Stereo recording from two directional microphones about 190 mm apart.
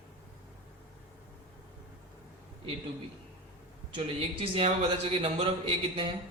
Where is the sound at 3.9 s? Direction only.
30° right (ahead or behind).